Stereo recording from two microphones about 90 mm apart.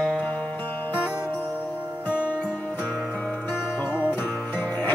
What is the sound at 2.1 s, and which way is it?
Music, 20° left (ahead or behind).